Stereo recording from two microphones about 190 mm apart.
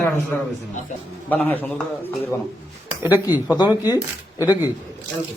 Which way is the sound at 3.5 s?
20° left (ahead or behind).